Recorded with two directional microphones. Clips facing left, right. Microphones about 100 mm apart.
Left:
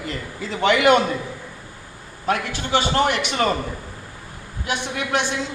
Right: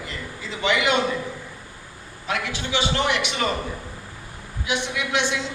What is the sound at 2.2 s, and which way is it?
A man's voice, 45° left (ahead or behind).